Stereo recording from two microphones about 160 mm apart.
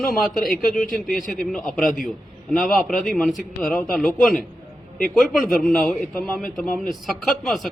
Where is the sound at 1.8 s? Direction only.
60° left (ahead or behind).